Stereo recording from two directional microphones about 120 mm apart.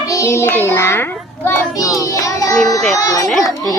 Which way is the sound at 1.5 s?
25° left (ahead or behind).